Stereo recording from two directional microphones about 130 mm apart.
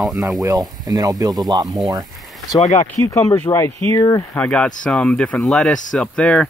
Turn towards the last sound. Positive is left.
turn(degrees=10)  # may be behind; listen again after turning